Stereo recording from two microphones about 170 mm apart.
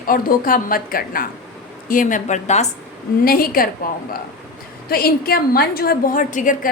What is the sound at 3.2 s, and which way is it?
A woman's voice, 60° left (ahead or behind).